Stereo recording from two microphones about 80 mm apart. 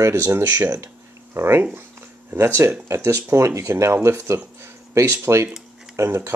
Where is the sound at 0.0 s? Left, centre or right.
Right.